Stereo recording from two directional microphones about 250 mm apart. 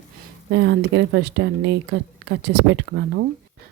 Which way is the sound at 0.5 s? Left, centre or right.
Right.